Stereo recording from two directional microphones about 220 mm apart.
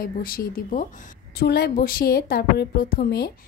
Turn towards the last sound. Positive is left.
turn(degrees=45)  # may be behind; listen again after turning